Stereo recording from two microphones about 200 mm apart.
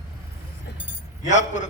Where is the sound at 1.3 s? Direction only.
35° left (ahead or behind).